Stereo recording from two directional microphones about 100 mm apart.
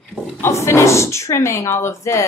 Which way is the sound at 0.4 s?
30° left (ahead or behind).